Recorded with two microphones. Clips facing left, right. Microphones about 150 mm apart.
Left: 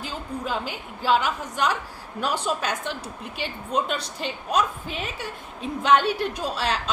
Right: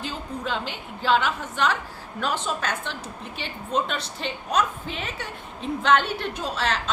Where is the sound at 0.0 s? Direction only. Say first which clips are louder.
Even; 5° left (ahead or behind).